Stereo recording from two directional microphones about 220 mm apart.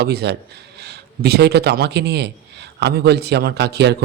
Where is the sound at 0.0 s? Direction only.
45° right (ahead or behind).